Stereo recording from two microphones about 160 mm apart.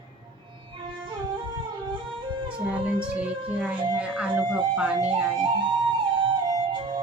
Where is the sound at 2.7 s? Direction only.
10° right (ahead or behind).